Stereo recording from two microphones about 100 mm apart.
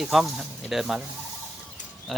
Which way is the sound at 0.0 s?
5° right (ahead or behind).